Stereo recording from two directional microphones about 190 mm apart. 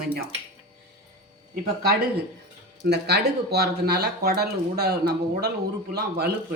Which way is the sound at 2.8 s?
60° right (ahead or behind).